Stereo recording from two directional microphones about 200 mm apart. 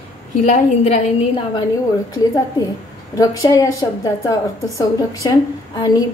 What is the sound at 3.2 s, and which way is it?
A woman's voice, 15° left (ahead or behind).